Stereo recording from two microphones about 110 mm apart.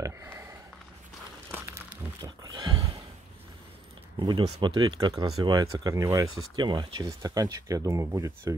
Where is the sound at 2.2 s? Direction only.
40° right (ahead or behind).